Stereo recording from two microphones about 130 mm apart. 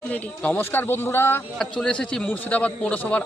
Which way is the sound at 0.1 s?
10° left (ahead or behind).